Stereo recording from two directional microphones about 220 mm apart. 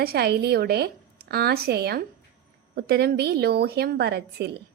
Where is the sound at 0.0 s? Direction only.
45° right (ahead or behind).